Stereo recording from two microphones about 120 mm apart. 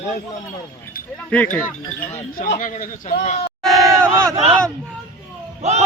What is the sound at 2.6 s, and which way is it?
Speech, 90° left.